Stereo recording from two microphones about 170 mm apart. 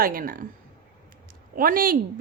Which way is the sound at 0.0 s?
60° right (ahead or behind).